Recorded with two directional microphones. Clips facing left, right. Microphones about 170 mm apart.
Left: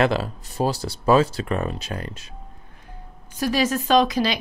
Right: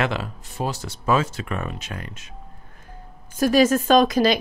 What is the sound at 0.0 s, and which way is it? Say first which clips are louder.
Speech: left 4 dB; 35° left (ahead or behind).